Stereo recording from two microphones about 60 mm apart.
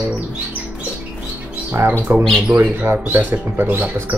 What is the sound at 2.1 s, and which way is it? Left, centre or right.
Speech, right.